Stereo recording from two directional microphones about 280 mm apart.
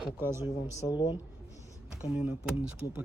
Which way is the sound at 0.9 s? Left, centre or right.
Centre.